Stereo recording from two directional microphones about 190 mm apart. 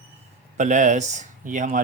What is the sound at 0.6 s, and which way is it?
Speech, 40° right (ahead or behind).